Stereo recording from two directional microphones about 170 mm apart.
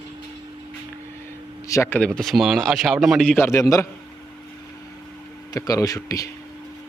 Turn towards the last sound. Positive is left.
turn(degrees=20)  # may be behind; listen again after turning